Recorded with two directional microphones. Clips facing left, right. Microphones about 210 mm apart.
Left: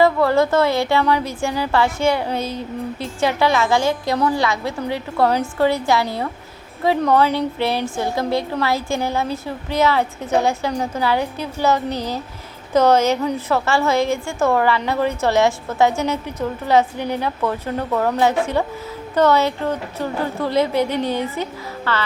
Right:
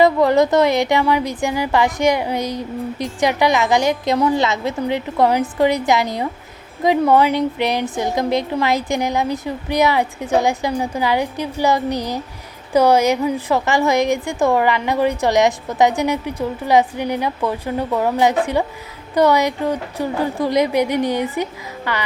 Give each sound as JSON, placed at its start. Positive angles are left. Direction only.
{"t": 0.0, "sound": "a woman's voice", "side_deg": -20}